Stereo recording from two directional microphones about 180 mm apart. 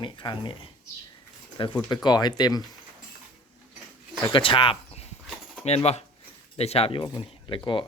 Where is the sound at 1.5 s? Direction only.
25° left (ahead or behind).